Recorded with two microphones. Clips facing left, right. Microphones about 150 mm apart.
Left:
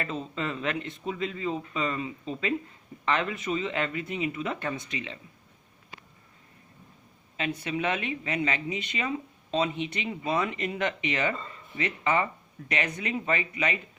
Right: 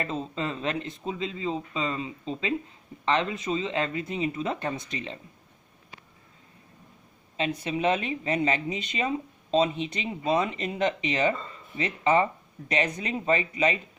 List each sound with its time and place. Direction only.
0.0 s speech: 30° right (ahead or behind)
7.6 s speech: 30° right (ahead or behind)